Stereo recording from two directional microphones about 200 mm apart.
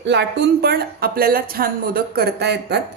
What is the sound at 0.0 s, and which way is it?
A woman's voice, 60° right (ahead or behind).